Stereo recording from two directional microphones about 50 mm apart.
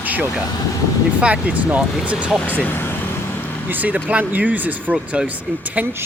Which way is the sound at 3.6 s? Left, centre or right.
Right.